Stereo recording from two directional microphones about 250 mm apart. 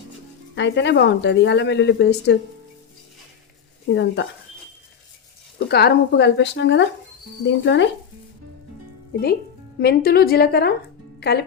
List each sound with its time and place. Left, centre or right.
0.5 s speech: left
3.9 s speech: left
5.5 s speech: left
9.8 s a woman's voice: left